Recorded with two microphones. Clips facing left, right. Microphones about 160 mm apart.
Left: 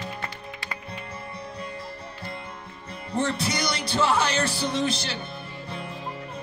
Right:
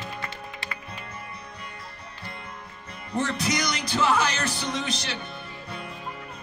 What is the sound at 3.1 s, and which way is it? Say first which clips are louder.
Music: even; 30° left (ahead or behind).